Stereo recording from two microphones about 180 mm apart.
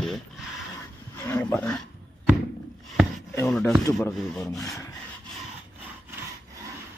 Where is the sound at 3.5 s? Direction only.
5° left (ahead or behind).